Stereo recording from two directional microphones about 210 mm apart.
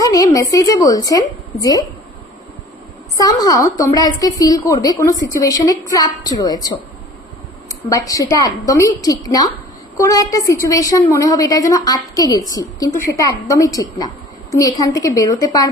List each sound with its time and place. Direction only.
0.0 s a woman's voice: 15° left (ahead or behind)
3.2 s a woman's voice: 15° left (ahead or behind)
7.9 s a woman's voice: 15° left (ahead or behind)